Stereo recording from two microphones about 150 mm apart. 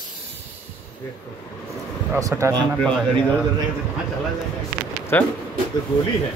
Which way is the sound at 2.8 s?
5° left (ahead or behind).